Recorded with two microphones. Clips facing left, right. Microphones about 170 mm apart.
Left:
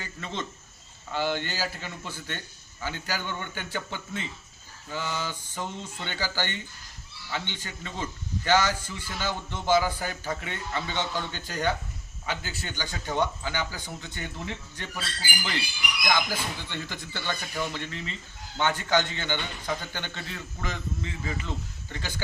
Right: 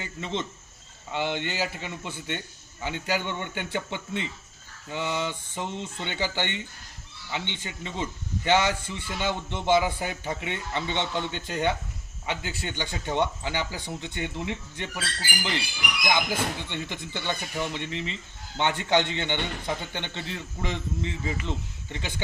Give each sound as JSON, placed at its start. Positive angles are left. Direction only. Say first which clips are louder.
{"t": 0.0, "sound": "a man's voice", "louder": "right 4 dB", "side_deg": -20}
{"t": 16.3, "sound": "speech", "louder": "right 4 dB", "side_deg": -55}
{"t": 16.6, "sound": "a man's voice", "louder": "right 2 dB", "side_deg": -20}